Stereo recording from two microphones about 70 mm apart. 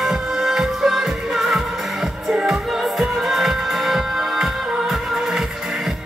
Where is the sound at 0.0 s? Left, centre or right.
Centre.